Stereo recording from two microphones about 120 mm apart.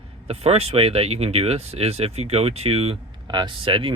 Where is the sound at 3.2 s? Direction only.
40° right (ahead or behind).